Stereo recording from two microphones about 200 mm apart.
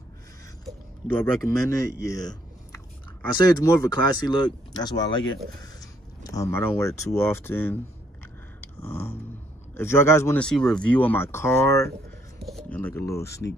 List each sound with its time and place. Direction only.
0.7 s speech: 10° left (ahead or behind)
8.8 s speech: 10° left (ahead or behind)